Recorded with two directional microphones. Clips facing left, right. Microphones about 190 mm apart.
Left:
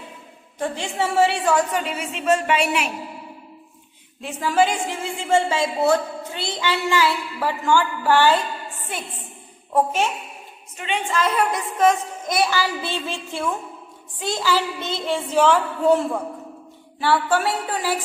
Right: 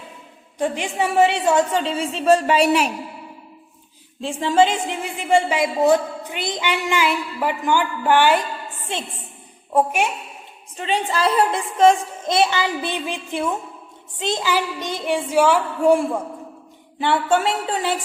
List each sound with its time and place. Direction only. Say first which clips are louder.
0.6 s a child's voice: right 2 dB; 15° right (ahead or behind); by 2.9 s 35° right (ahead or behind)
4.2 s a woman's voice: right 3 dB; 25° right (ahead or behind)
10.8 s a child's voice: right 2 dB; 35° right (ahead or behind); by 16.2 s 10° right (ahead or behind)
17.0 s a child's voice: right 1 dB; 20° right (ahead or behind)